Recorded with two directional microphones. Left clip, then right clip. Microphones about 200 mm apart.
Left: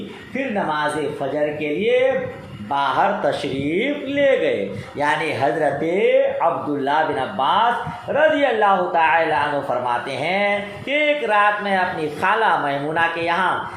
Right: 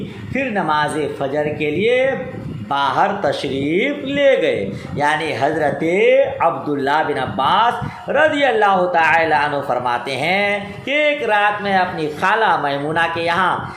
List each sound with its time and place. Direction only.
2.6 s a man's voice: 40° right (ahead or behind)